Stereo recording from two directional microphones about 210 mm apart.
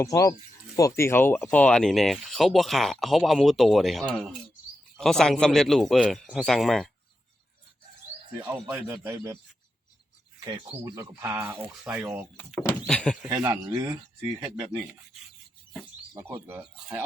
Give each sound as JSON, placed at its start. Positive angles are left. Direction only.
{"t": 0.0, "sound": "speech", "side_deg": 15}
{"t": 8.7, "sound": "speech", "side_deg": -15}
{"t": 10.5, "sound": "speech", "side_deg": -15}
{"t": 12.4, "sound": "speech", "side_deg": 5}
{"t": 13.2, "sound": "speech", "side_deg": -15}
{"t": 16.1, "sound": "speech", "side_deg": -10}